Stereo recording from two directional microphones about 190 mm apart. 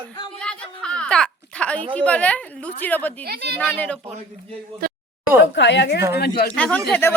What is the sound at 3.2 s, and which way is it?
Speech, 55° right (ahead or behind).